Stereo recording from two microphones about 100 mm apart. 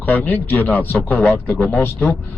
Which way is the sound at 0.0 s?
15° left (ahead or behind).